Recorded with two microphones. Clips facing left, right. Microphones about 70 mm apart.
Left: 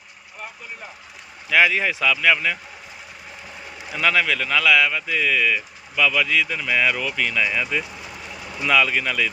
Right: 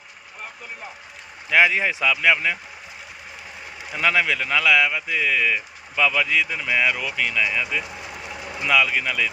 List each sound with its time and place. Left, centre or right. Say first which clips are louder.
1.5 s speech: even; right
3.9 s a man's voice: left 1 dB; centre